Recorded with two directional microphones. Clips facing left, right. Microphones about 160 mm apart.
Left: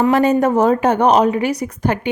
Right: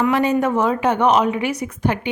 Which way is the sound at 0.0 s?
45° left (ahead or behind).